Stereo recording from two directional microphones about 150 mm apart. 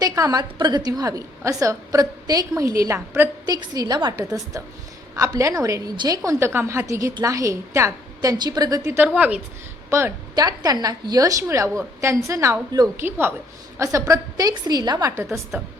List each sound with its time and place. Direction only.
0.0 s a woman's voice: 25° right (ahead or behind)
9.1 s a woman's voice: 10° right (ahead or behind)
9.9 s a woman's voice: 20° right (ahead or behind)
15.2 s a woman's voice: 15° right (ahead or behind)